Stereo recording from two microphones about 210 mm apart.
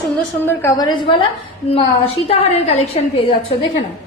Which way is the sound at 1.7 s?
30° left (ahead or behind).